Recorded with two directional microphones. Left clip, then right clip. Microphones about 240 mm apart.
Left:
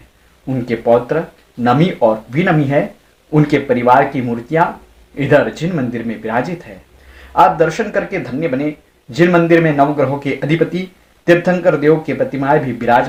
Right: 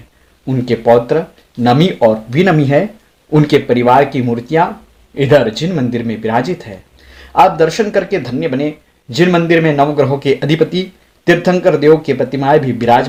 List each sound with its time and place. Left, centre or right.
0.4 s speech: right
2.4 s speech: right
3.3 s speech: right